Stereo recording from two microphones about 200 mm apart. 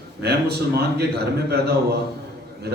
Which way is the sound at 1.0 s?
55° right (ahead or behind).